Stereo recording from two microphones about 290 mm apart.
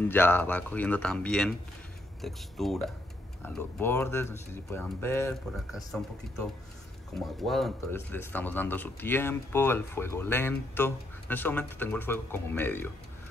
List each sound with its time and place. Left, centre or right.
0.1 s speech: centre